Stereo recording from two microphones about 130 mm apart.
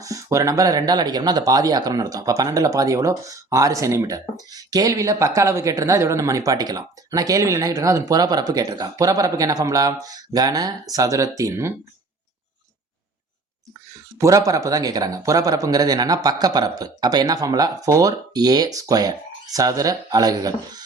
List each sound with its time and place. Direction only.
0.0 s speech: 25° right (ahead or behind)
14.2 s speech: 25° right (ahead or behind)